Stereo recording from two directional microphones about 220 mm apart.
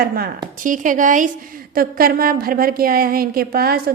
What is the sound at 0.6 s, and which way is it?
A woman's voice, 35° right (ahead or behind).